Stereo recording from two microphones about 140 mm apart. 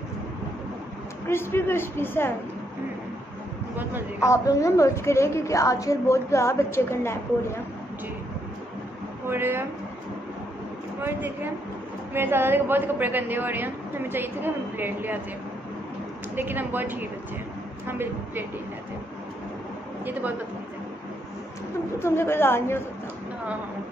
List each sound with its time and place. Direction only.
1.2 s a woman's voice: 15° left (ahead or behind)
4.2 s a woman's voice: 20° left (ahead or behind)
9.3 s a woman's voice: 15° right (ahead or behind)
11.0 s a woman's voice: 15° right (ahead or behind)
16.3 s a woman's voice: 15° right (ahead or behind)
20.1 s a woman's voice: 10° right (ahead or behind)
22.0 s a woman's voice: 15° left (ahead or behind)